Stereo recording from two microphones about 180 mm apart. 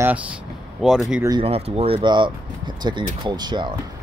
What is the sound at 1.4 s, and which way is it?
Speech, 35° right (ahead or behind).